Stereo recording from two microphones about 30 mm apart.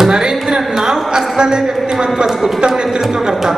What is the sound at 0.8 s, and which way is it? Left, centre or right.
A man's voice, centre.